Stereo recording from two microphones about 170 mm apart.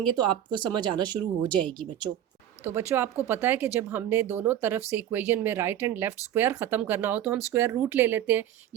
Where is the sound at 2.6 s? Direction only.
15° right (ahead or behind).